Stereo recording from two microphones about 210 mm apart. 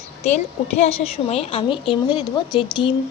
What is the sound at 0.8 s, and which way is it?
A woman's voice, 30° left (ahead or behind).